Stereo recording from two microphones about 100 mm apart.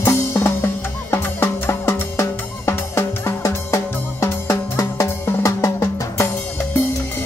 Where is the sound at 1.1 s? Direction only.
25° left (ahead or behind).